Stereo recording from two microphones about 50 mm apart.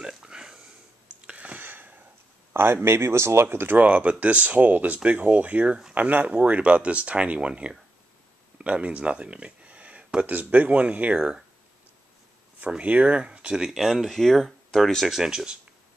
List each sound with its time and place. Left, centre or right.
0.0 s a sound: centre
1.2 s a sound: right
1.6 s a sound: right
2.5 s speech: right
3.4 s speech: right
3.8 s speech: right
12.5 s speech: right
13.6 s speech: centre
15.0 s speech: centre